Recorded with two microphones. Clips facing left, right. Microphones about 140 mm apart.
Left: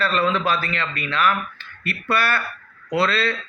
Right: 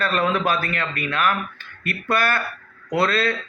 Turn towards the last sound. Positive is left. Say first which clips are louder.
# even
turn(degrees=-50)  # may be behind; listen again after turning